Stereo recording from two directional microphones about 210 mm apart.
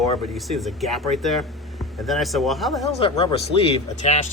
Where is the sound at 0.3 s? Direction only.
Centre (ahead or behind).